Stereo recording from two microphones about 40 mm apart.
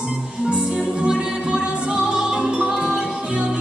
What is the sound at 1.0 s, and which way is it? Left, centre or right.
Music, centre.